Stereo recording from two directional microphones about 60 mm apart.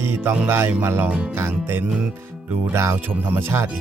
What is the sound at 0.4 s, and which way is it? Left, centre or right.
Speech, right.